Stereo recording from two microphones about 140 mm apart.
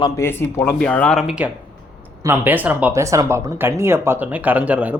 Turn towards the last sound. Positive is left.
turn(degrees=-10)  # may be behind; listen again after turning